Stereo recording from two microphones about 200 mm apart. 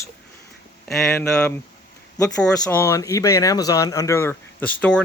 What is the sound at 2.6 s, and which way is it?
Speech, 15° left (ahead or behind).